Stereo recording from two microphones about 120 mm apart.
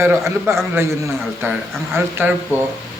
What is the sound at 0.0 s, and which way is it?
Speech, 20° right (ahead or behind).